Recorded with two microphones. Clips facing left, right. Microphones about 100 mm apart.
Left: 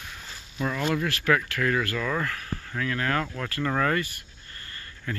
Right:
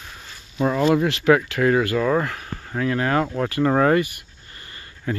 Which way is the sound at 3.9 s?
10° right (ahead or behind).